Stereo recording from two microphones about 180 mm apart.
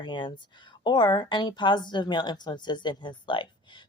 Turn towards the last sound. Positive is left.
turn(degrees=25)  # may be behind; listen again after turning